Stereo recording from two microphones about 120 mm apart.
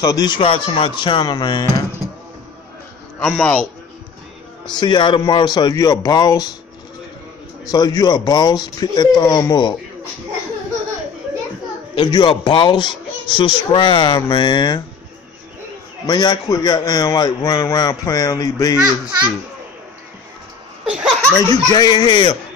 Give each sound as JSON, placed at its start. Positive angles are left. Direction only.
{"t": 0.0, "sound": "speech", "side_deg": 35}
{"t": 0.4, "sound": "speech", "side_deg": 50}
{"t": 3.2, "sound": "a man's voice", "side_deg": 5}
{"t": 4.7, "sound": "speech", "side_deg": 40}
{"t": 7.7, "sound": "speech", "side_deg": 35}
{"t": 11.9, "sound": "speech", "side_deg": 40}
{"t": 16.1, "sound": "speech", "side_deg": 35}
{"t": 20.8, "sound": "laughter", "side_deg": -5}
{"t": 21.4, "sound": "speech", "side_deg": 30}